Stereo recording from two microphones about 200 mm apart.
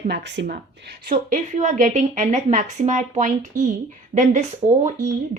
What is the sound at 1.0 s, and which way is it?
A woman's voice, 40° right (ahead or behind).